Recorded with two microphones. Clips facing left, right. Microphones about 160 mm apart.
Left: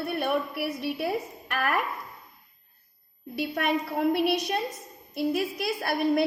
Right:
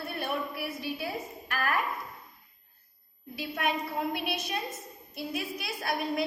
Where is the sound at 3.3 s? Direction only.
60° left (ahead or behind).